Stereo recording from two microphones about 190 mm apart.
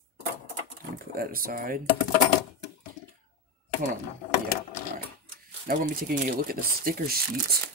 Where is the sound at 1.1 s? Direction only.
50° right (ahead or behind).